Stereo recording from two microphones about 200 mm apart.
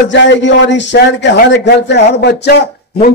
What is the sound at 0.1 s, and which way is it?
A man's voice, 65° left (ahead or behind).